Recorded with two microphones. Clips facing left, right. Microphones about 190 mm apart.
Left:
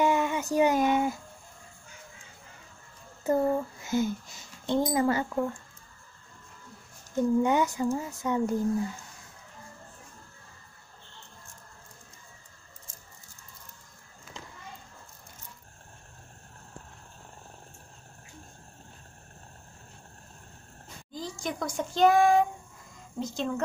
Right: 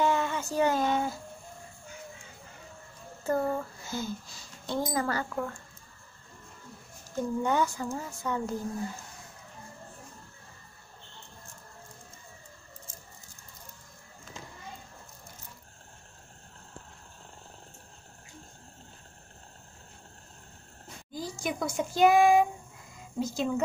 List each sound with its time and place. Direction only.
0.0 s a sound: 15° left (ahead or behind)
3.3 s speech: 20° left (ahead or behind)
7.2 s speech: 20° left (ahead or behind)
21.1 s speech: 10° right (ahead or behind)